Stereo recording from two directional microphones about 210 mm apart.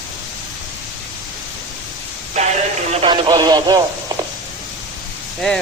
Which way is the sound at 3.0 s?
20° right (ahead or behind).